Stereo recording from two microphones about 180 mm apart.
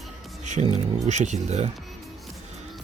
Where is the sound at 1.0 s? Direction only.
40° right (ahead or behind).